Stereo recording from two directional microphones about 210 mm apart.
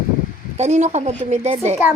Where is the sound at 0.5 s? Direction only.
30° right (ahead or behind).